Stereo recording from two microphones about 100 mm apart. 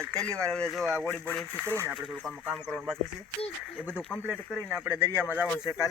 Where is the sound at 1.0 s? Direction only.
20° left (ahead or behind).